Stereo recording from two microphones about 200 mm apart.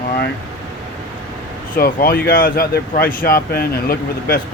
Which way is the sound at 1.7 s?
45° left (ahead or behind).